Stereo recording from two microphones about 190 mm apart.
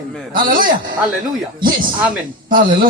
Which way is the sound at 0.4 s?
45° right (ahead or behind).